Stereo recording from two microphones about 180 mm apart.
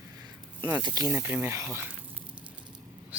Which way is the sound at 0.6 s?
20° right (ahead or behind).